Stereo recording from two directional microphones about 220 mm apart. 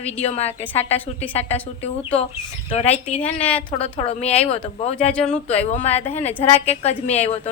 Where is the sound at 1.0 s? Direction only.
5° left (ahead or behind).